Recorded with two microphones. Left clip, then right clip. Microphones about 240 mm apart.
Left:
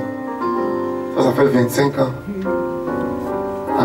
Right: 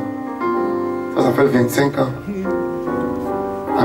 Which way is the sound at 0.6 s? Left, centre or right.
Centre.